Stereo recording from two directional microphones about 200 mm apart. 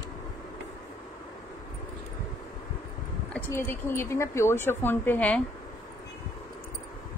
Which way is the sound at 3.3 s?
10° left (ahead or behind).